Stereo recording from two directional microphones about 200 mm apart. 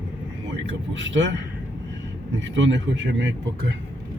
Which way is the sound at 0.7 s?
65° right (ahead or behind).